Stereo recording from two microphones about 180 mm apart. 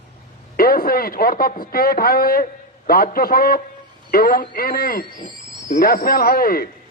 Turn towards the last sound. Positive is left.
turn(degrees=55)  # may be behind; listen again after turning